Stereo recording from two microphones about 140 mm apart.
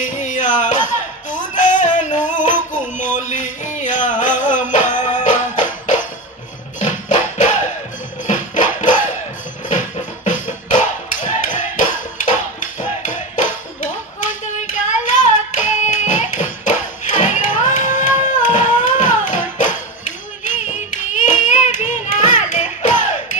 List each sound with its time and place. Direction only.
0.0 s music: 60° left (ahead or behind)
14.4 s hands: 60° left (ahead or behind)